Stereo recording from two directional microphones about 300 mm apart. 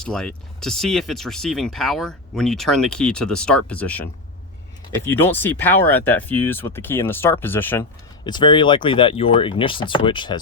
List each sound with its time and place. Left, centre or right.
0.0 s speech: centre